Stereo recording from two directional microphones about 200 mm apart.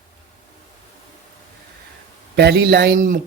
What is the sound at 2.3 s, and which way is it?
Speech, 55° right (ahead or behind).